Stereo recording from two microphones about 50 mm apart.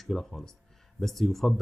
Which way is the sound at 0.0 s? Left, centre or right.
Centre.